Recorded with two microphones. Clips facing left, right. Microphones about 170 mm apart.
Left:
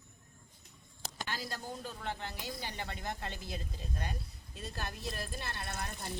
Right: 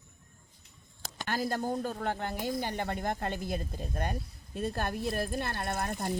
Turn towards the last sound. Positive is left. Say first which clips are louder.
# right 9 dB
turn(degrees=-60)  # may be behind; listen again after turning